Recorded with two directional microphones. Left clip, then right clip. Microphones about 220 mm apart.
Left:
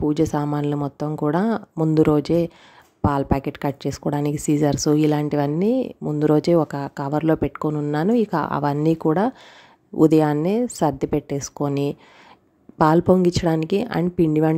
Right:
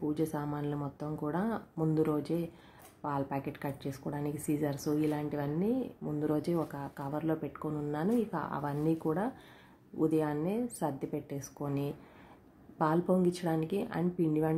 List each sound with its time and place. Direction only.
0.0 s speech: 40° left (ahead or behind)